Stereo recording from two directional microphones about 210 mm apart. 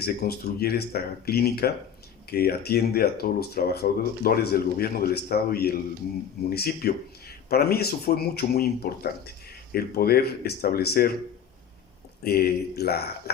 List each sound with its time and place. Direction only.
0.0 s speech: 50° left (ahead or behind)
12.2 s speech: 50° left (ahead or behind)